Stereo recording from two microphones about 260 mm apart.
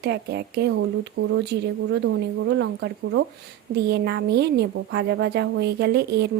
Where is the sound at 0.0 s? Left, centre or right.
Right.